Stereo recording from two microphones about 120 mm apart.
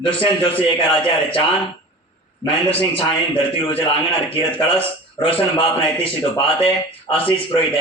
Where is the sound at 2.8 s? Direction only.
50° left (ahead or behind).